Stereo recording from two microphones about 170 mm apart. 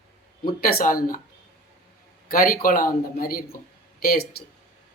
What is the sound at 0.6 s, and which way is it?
Speech, 55° left (ahead or behind).